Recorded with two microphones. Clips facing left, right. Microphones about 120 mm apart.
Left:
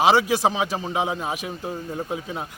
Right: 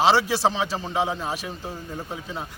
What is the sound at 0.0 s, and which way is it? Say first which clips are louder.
A man's voice: left 1 dB; 15° left (ahead or behind).